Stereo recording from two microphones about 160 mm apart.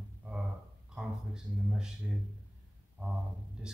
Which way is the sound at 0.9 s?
5° right (ahead or behind).